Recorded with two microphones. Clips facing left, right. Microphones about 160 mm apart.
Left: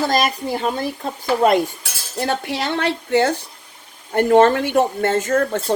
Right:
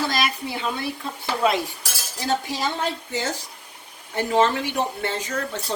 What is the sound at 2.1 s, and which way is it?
Speech, 60° left (ahead or behind).